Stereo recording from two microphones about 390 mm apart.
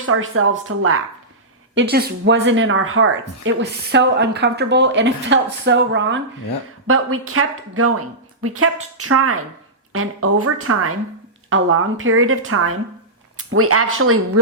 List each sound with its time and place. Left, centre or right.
0.0 s speech: right